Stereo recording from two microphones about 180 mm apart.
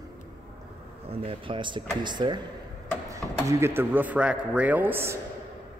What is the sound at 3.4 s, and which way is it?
A man's voice, 15° right (ahead or behind).